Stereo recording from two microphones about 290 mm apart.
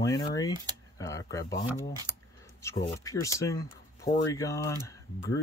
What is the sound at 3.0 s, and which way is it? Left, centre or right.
Speech, centre.